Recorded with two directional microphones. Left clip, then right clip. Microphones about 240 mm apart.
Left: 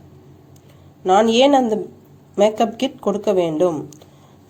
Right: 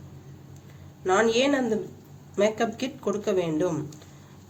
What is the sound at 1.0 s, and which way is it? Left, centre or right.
Speech, left.